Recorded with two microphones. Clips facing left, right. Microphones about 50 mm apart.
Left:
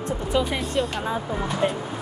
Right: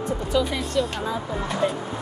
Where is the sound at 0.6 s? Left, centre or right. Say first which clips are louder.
Even; centre.